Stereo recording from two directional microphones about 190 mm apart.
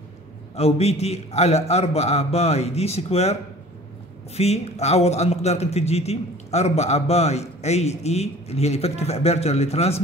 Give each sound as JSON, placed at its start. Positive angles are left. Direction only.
{"t": 0.6, "sound": "a man's voice", "side_deg": 30}
{"t": 4.4, "sound": "a man's voice", "side_deg": 35}